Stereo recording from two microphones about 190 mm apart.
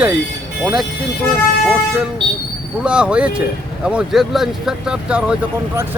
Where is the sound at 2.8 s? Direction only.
5° right (ahead or behind).